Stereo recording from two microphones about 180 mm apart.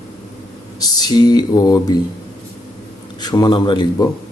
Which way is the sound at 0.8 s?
20° left (ahead or behind).